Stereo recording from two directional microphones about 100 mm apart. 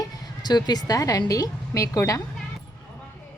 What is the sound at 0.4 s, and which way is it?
Speech, 45° left (ahead or behind).